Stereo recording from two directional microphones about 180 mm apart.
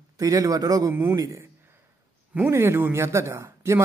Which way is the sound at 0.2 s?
20° right (ahead or behind).